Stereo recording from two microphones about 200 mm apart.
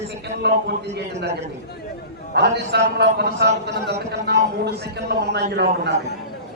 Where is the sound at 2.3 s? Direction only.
55° right (ahead or behind).